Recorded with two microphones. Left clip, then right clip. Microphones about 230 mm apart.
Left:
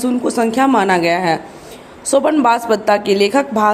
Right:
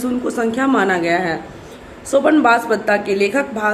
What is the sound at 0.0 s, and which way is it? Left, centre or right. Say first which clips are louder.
A woman's voice: left 3 dB; left.